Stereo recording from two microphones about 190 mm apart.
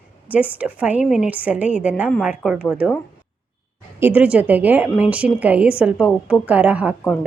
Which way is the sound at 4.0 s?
10° right (ahead or behind).